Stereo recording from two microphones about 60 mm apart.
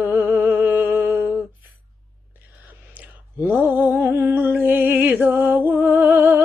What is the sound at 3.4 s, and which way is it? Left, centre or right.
Music, right.